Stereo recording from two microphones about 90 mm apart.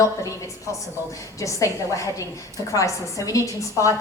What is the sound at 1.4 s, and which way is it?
A woman's voice, 35° left (ahead or behind).